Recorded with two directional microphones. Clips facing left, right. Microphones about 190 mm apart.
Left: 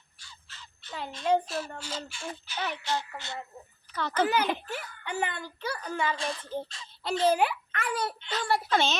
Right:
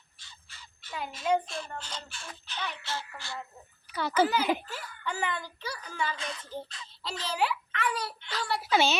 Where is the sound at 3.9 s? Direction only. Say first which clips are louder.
Right 2 dB; 10° right (ahead or behind).